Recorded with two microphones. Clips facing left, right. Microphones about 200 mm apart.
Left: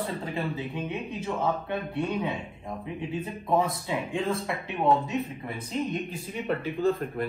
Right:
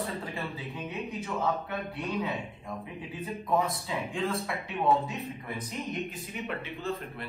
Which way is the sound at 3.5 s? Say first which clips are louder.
Left 3 dB; 25° left (ahead or behind).